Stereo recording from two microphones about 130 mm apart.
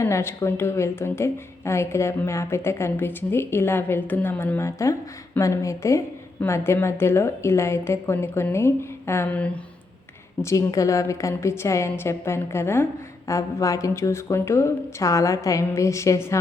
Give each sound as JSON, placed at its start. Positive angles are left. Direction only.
{"t": 0.0, "sound": "a woman's voice", "side_deg": 20}
{"t": 10.4, "sound": "a woman's voice", "side_deg": 25}